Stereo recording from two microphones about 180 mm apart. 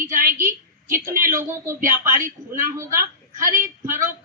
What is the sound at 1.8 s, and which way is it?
Speech, 50° right (ahead or behind).